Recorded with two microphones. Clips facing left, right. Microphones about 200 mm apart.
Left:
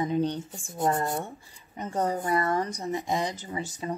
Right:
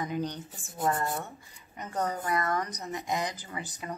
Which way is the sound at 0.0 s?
30° left (ahead or behind).